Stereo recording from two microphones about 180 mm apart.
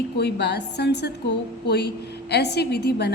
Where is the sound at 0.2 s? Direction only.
70° left (ahead or behind).